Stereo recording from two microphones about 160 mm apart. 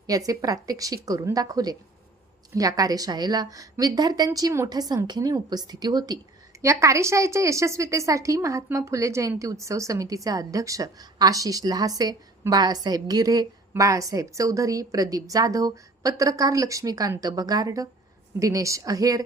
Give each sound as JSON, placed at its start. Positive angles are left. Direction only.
{"t": 0.1, "sound": "a woman's voice", "side_deg": -20}